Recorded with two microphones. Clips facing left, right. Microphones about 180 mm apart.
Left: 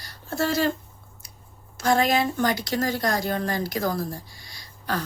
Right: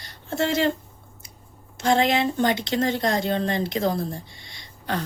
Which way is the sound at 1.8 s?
25° right (ahead or behind).